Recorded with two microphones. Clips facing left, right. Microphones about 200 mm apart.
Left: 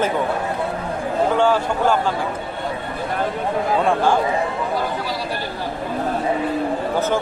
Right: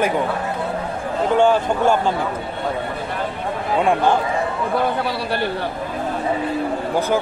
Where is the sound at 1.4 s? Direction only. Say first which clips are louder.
Right 5 dB; 15° right (ahead or behind).